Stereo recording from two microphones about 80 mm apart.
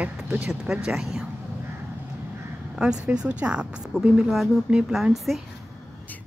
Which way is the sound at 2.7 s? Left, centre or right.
Centre.